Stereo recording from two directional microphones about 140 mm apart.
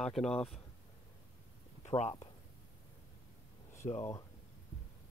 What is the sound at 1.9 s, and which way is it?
Speech, 45° left (ahead or behind).